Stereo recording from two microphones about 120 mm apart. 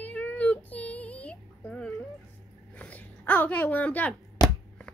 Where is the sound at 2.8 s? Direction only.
10° left (ahead or behind).